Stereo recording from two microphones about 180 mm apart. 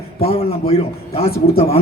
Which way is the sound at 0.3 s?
35° left (ahead or behind).